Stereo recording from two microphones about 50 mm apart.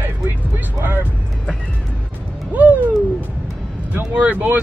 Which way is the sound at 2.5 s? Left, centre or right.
Right.